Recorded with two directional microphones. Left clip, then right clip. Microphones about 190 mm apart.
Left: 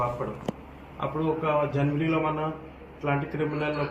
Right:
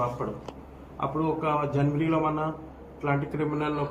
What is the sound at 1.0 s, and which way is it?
A man's voice, 15° right (ahead or behind).